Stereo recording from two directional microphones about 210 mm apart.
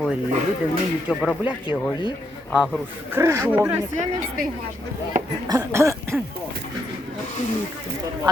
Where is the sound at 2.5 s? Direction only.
5° right (ahead or behind).